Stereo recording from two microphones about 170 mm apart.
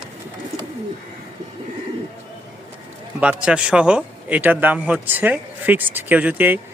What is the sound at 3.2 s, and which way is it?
A man's voice, 5° right (ahead or behind).